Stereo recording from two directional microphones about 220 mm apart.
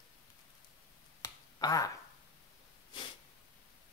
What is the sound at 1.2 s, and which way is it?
Finger snapping, 15° left (ahead or behind).